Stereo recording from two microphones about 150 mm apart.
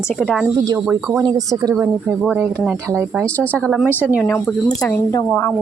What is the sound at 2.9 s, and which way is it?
A woman's voice, 20° right (ahead or behind).